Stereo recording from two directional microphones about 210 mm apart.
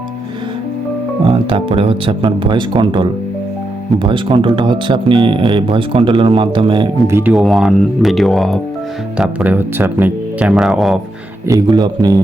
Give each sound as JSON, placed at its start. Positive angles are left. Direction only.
{"t": 1.2, "sound": "speech", "side_deg": -25}
{"t": 7.2, "sound": "speech", "side_deg": -5}
{"t": 11.4, "sound": "a man's voice", "side_deg": -15}